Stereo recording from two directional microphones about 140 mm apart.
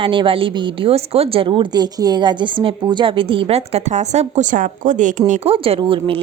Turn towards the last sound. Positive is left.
turn(degrees=-40)  # may be behind; listen again after turning